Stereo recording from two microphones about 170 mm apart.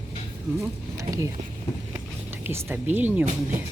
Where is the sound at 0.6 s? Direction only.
20° right (ahead or behind).